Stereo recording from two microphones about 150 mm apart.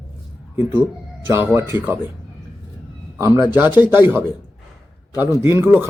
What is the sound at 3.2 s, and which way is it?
A man's voice, 20° right (ahead or behind).